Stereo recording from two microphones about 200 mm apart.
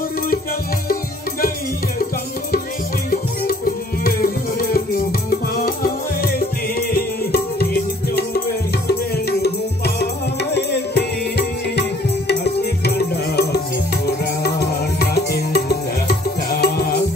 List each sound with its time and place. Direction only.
3.1 s music: 45° left (ahead or behind)
7.3 s music: 50° left (ahead or behind)